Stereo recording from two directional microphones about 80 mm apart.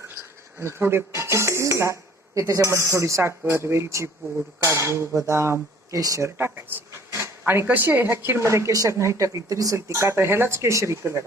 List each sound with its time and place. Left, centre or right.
0.6 s speech: right
9.7 s speech: right